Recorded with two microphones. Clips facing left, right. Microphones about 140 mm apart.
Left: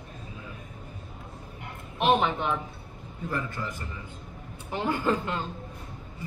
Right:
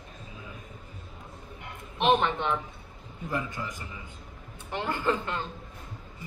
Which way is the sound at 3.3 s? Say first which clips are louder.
Even; 15° right (ahead or behind).